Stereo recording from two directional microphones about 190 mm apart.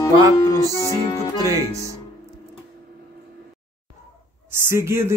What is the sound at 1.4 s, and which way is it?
Speech, 15° right (ahead or behind).